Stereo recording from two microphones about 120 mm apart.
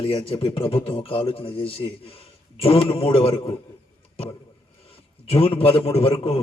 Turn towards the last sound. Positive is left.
turn(degrees=50)  # may be behind; listen again after turning